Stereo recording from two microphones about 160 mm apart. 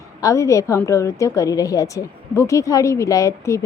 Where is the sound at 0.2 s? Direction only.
20° left (ahead or behind).